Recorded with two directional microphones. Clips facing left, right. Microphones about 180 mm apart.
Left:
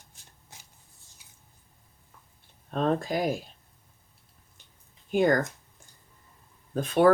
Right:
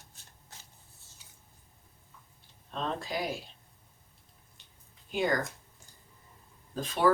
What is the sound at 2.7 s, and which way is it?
Speech, 50° left (ahead or behind).